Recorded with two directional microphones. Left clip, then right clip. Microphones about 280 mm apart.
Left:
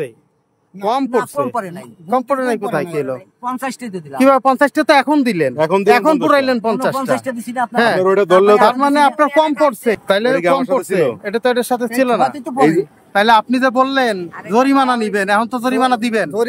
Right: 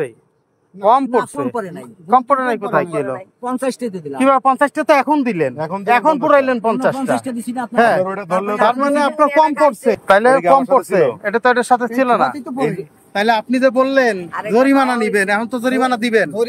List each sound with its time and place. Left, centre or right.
0.8 s a man's voice: centre
8.0 s speech: left
8.5 s a man's voice: centre